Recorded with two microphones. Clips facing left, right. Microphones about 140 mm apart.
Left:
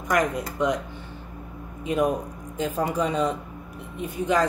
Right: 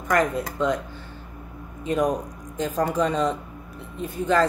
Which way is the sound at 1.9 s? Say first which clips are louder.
Even; 10° left (ahead or behind).